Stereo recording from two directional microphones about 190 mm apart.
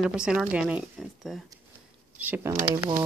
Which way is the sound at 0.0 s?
5° right (ahead or behind).